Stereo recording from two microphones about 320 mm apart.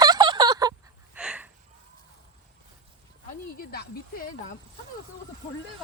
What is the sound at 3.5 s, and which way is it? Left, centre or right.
Speech, left.